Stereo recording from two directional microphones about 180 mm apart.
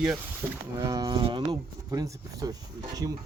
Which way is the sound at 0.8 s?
20° right (ahead or behind).